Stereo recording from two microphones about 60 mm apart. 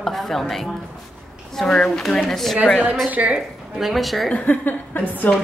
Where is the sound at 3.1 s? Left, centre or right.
Right.